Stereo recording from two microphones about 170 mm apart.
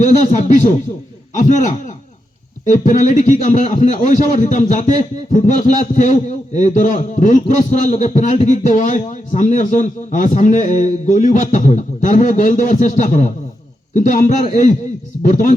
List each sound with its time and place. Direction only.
0.0 s a man's voice: 45° left (ahead or behind)